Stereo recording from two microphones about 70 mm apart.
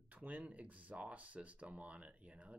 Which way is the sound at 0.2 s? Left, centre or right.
Right.